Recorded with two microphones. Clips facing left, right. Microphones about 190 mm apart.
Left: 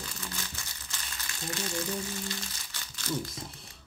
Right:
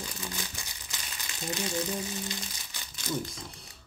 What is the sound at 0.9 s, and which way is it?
Crumpling, 15° right (ahead or behind).